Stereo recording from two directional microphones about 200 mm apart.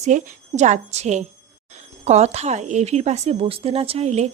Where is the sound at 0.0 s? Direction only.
35° right (ahead or behind).